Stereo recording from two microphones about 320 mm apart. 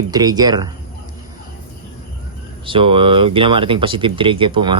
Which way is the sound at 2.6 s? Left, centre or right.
Centre.